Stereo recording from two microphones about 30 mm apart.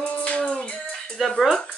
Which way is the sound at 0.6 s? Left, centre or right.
Left.